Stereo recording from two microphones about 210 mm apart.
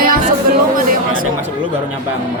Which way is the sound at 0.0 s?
40° right (ahead or behind).